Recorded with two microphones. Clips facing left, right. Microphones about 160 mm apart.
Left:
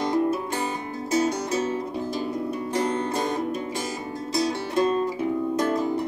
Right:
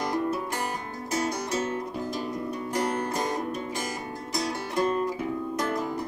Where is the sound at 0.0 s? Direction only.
25° left (ahead or behind).